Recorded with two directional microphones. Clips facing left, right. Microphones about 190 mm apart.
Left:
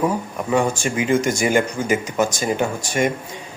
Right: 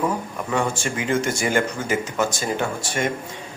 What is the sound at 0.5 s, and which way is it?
Speech, 15° left (ahead or behind).